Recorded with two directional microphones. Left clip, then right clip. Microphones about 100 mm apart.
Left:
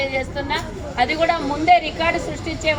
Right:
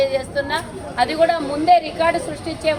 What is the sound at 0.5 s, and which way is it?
A woman's voice, 25° right (ahead or behind).